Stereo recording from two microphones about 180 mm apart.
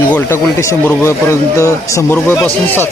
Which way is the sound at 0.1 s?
15° left (ahead or behind).